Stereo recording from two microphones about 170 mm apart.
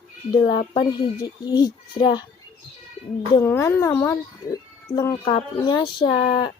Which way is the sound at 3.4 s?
15° left (ahead or behind).